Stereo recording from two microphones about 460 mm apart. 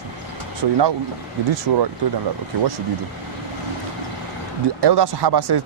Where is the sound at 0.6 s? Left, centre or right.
Right.